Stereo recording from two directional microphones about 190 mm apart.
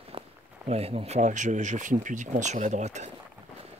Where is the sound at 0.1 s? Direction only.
30° right (ahead or behind).